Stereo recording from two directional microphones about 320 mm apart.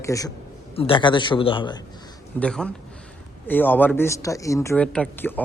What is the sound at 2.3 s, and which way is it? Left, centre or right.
A man's voice, centre.